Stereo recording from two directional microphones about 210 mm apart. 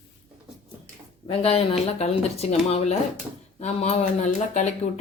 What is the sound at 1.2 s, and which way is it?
Speech, 30° left (ahead or behind).